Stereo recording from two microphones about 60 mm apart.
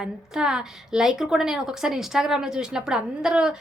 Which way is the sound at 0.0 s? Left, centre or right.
Centre.